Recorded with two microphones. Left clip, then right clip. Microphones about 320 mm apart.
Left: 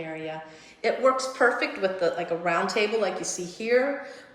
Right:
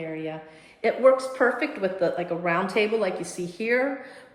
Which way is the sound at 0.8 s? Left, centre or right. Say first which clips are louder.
Right 3 dB; right.